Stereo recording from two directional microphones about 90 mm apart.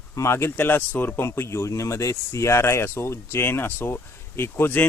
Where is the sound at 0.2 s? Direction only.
30° left (ahead or behind).